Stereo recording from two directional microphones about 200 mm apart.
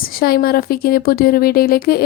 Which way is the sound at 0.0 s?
45° left (ahead or behind).